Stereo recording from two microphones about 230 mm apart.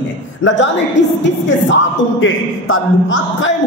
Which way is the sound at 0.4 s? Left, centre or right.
Left.